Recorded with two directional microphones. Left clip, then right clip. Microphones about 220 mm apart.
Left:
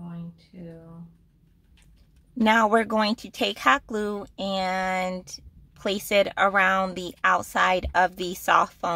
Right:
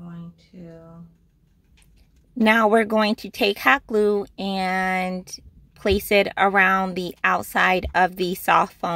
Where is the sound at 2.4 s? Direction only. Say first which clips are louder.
Right 3 dB; 15° right (ahead or behind).